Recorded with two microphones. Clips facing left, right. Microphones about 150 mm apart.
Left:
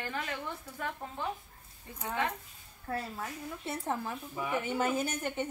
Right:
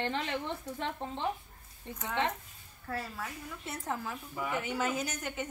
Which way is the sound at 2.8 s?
25° left (ahead or behind).